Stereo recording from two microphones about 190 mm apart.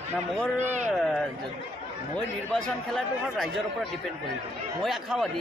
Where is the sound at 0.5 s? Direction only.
40° right (ahead or behind).